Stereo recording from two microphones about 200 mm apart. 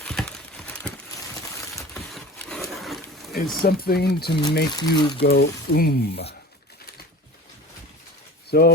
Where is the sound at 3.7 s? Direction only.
50° left (ahead or behind).